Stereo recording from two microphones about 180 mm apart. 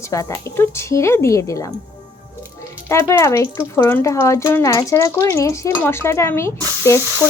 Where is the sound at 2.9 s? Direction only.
15° left (ahead or behind).